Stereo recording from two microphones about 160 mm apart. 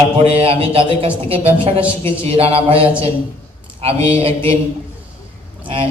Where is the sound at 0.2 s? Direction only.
35° right (ahead or behind).